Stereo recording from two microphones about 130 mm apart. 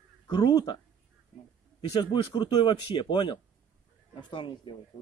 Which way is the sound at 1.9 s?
35° left (ahead or behind).